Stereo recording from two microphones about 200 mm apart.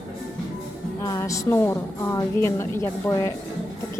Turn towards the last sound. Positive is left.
turn(degrees=15)  # may be behind; listen again after turning